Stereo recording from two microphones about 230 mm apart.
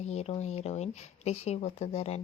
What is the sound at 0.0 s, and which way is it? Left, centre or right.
Speech, left.